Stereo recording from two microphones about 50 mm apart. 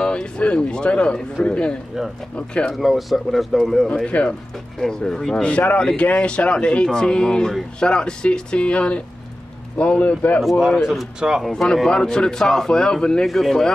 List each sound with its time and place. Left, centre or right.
0.0 s speech: left
2.7 s speech: centre
3.9 s speech: left
4.7 s speech: centre
5.3 s speech: left
11.1 s speech: centre
11.5 s speech: centre